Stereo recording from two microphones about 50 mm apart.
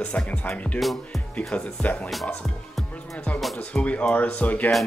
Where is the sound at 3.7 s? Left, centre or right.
Left.